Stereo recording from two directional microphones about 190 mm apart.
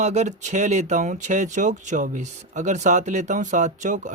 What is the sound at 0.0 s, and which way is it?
Speech, 40° right (ahead or behind).